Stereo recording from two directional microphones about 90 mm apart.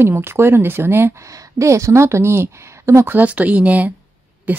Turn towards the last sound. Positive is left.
turn(degrees=-20)  # may be behind; listen again after turning